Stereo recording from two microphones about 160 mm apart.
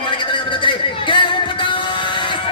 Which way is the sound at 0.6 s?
30° left (ahead or behind).